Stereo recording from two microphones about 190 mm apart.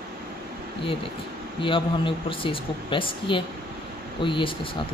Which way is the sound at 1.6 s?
25° left (ahead or behind).